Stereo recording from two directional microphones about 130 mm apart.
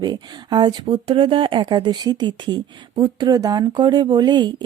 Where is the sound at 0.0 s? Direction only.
35° right (ahead or behind).